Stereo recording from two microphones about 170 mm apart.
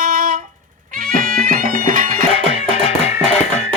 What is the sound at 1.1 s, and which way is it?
Music, 55° right (ahead or behind).